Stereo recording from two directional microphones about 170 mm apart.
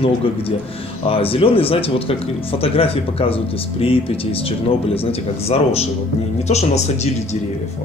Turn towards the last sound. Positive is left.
turn(degrees=40)  # may be behind; listen again after turning